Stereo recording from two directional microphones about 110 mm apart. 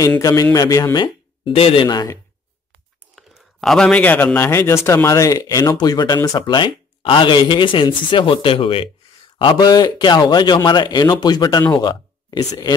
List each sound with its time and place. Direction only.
0.2 s a man's voice: 30° left (ahead or behind)
1.0 s speech: 55° left (ahead or behind)
1.9 s a man's voice: 40° left (ahead or behind)
3.2 s a man's voice: centre (ahead or behind); by 12.7 s 35° left (ahead or behind)